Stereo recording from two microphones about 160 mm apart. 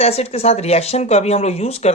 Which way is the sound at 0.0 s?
40° left (ahead or behind).